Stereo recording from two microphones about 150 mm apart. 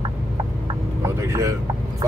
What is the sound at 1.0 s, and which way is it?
Vehicle, 20° right (ahead or behind).